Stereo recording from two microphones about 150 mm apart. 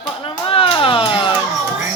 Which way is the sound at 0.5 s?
35° left (ahead or behind).